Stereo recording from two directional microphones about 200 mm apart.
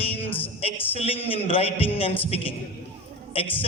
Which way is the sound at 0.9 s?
30° left (ahead or behind).